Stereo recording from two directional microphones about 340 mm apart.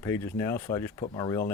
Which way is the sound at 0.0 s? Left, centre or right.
Centre.